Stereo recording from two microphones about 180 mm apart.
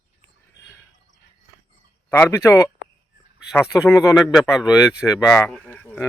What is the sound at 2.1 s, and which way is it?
Speech, 15° left (ahead or behind).